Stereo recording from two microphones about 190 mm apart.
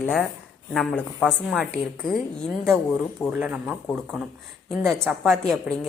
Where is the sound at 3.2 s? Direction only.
5° right (ahead or behind).